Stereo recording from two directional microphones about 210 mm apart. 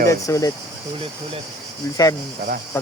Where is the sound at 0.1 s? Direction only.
15° left (ahead or behind).